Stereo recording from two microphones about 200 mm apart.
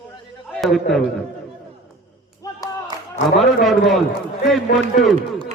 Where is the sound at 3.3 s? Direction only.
Centre (ahead or behind).